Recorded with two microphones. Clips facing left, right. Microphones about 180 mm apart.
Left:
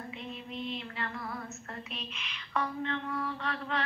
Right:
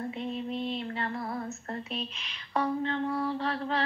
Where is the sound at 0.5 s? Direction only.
40° right (ahead or behind).